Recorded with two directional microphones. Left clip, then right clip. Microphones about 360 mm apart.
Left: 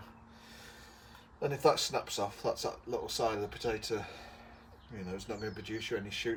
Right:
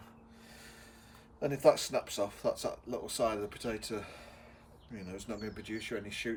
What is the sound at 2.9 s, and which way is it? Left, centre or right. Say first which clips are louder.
Speech: even; left.